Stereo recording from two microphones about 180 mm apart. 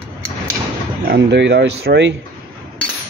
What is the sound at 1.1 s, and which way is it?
Speech, 75° right (ahead or behind).